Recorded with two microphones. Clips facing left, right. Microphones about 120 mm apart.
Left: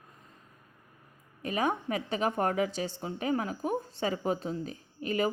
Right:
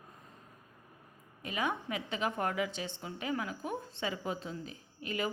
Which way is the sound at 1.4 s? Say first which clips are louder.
Left 5 dB; 40° left (ahead or behind).